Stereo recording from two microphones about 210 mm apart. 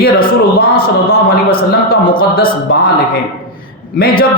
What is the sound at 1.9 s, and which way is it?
A man's voice, 45° left (ahead or behind).